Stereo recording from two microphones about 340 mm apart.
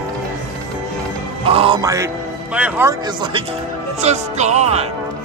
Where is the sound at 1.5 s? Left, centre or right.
Centre.